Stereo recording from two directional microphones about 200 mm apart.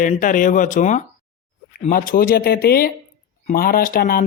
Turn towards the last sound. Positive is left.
turn(degrees=45)  # may be behind; listen again after turning